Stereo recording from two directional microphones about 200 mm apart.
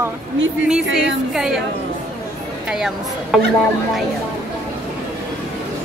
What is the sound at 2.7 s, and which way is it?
Speech, centre (ahead or behind).